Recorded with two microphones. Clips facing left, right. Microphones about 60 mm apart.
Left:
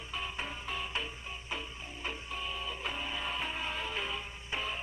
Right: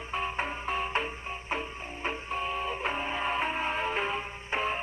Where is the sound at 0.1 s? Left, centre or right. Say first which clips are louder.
Right 7 dB; right.